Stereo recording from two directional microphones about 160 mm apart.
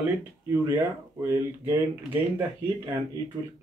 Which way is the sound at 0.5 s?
15° right (ahead or behind).